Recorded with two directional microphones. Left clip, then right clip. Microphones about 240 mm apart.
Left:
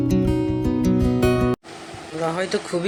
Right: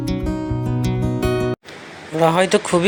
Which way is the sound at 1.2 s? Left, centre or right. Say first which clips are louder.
Right 1 dB; centre.